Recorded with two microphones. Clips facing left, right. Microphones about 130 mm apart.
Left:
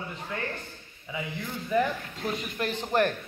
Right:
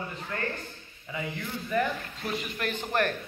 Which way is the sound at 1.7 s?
15° left (ahead or behind).